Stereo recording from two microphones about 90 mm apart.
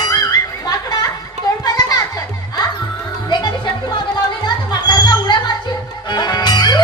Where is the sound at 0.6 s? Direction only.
45° left (ahead or behind).